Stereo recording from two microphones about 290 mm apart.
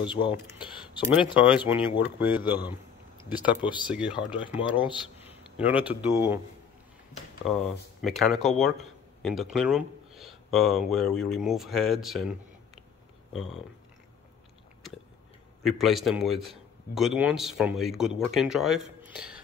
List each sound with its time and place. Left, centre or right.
0.0 s speech: centre
1.0 s a man's voice: centre
7.4 s speech: centre
15.6 s a man's voice: centre